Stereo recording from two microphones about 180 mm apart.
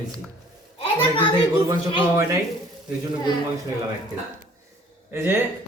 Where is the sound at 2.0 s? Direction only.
20° right (ahead or behind).